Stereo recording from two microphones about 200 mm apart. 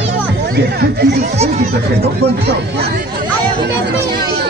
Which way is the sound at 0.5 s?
55° right (ahead or behind).